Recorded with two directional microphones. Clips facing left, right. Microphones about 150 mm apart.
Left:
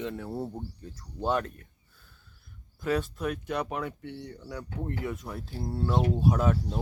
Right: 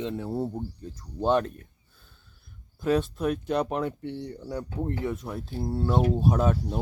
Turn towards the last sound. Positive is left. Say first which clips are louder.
# right 2 dB
turn(degrees=-20)  # may be behind; listen again after turning